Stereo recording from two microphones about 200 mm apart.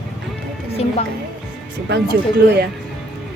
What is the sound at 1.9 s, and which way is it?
Speech, 55° right (ahead or behind).